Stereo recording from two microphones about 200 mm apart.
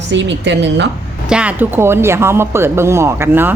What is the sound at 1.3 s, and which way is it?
Speech, 5° right (ahead or behind).